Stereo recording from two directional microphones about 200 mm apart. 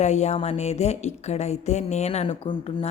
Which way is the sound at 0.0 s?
35° left (ahead or behind).